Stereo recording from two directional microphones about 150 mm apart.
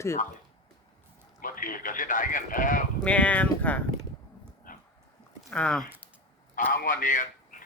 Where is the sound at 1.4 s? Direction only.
65° left (ahead or behind).